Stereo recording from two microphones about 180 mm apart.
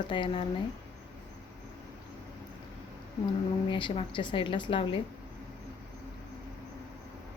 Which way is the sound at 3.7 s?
25° left (ahead or behind).